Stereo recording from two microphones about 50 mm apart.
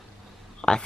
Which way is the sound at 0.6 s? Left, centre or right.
Centre.